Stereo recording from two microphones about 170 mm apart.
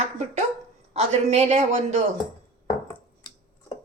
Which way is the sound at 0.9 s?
40° right (ahead or behind).